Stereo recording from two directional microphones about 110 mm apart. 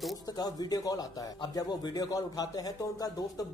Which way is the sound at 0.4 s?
35° left (ahead or behind).